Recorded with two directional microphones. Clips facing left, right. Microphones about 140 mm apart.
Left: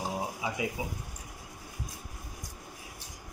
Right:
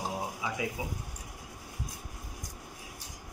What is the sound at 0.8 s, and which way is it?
Speech, 20° left (ahead or behind).